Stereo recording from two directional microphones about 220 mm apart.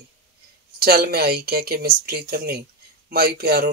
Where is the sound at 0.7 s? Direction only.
45° right (ahead or behind).